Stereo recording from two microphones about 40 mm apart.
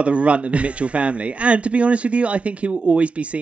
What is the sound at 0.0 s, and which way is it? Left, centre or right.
A man's voice, right.